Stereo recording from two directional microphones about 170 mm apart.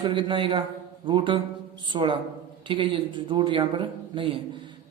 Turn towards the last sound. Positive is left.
turn(degrees=-30)  # may be behind; listen again after turning